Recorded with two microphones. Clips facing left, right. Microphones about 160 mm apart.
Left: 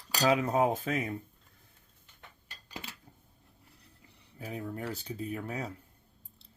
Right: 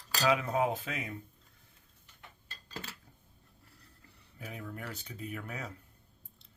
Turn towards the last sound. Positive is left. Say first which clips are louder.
# left 5 dB
turn(degrees=35)  # may be behind; listen again after turning